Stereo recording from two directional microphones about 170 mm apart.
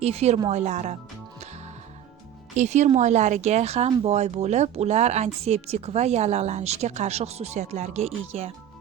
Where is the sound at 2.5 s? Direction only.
45° right (ahead or behind).